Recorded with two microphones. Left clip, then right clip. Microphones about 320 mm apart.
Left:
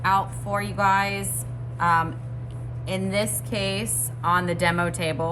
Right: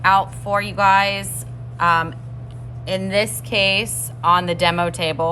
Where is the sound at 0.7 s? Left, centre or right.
Centre.